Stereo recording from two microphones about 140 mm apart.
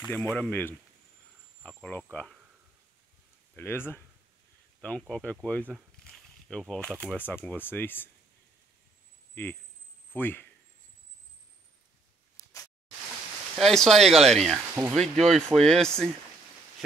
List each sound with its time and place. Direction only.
0.0 s speech: 5° left (ahead or behind)
3.5 s speech: 15° left (ahead or behind)
6.0 s snake: 5° left (ahead or behind)
7.2 s speech: 15° left (ahead or behind)
9.3 s speech: 15° left (ahead or behind)
13.6 s speech: 5° left (ahead or behind)